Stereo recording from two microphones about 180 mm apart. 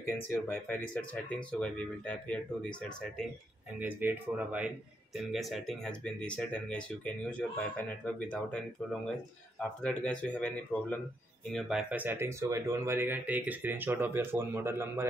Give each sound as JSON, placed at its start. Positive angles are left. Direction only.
{"t": 0.0, "sound": "speech", "side_deg": 15}
{"t": 3.8, "sound": "speech", "side_deg": -10}
{"t": 11.5, "sound": "speech", "side_deg": -5}